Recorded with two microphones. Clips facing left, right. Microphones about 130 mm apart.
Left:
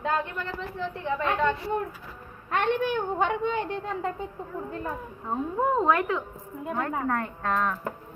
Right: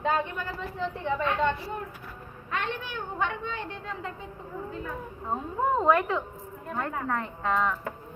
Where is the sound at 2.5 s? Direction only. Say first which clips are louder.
Left 8 dB; 55° left (ahead or behind).